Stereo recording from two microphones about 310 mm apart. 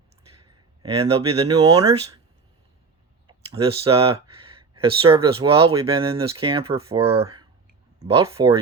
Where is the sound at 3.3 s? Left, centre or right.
Centre.